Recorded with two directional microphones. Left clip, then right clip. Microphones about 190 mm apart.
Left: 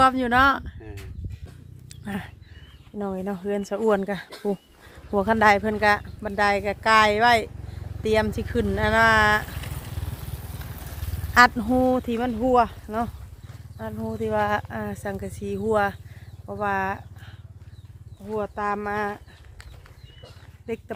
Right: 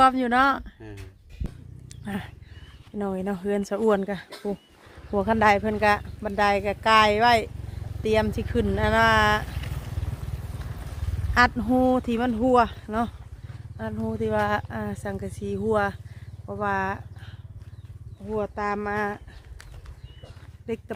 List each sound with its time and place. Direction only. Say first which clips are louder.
0.0 s speech: left 1 dB; centre (ahead or behind)
1.9 s a sound: left 1 dB; centre (ahead or behind)
2.9 s speech: right 1 dB; 15° right (ahead or behind)
4.0 s speech: left 3 dB; 10° left (ahead or behind)
9.5 s vehicle: left 1 dB; 35° left (ahead or behind); by 10.8 s 55° left (ahead or behind)
11.3 s speech: left 3 dB; 10° left (ahead or behind)
18.3 s speech: left 1 dB; 5° left (ahead or behind)
20.7 s speech: even; centre (ahead or behind)